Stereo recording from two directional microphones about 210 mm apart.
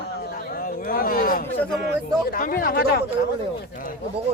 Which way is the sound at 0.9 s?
45° left (ahead or behind).